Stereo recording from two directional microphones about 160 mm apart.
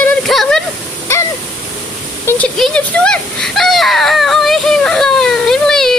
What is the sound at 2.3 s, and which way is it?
Speech, 15° left (ahead or behind).